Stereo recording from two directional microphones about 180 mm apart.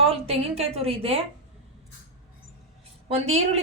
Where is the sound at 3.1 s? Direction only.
35° right (ahead or behind).